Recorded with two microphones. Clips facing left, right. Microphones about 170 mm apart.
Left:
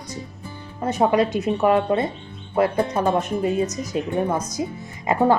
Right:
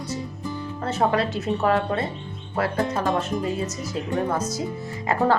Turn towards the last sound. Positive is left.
turn(degrees=15)  # may be behind; listen again after turning